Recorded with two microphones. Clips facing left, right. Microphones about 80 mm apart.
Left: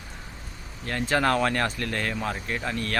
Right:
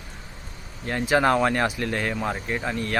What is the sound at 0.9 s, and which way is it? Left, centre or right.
Speech, centre.